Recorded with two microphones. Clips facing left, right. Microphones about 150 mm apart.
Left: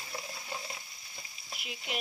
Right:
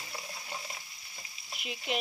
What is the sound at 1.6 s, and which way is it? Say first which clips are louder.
Frying: right 5 dB; centre (ahead or behind).